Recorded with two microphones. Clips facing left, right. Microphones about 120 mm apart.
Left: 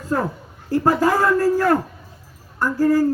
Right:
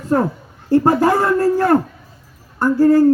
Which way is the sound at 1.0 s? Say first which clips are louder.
Right 2 dB; 25° right (ahead or behind).